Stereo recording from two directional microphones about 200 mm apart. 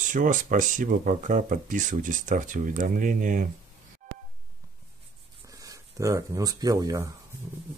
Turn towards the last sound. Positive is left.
turn(degrees=-15)  # may be behind; listen again after turning